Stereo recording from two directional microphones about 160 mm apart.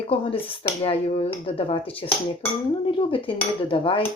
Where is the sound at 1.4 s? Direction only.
35° left (ahead or behind).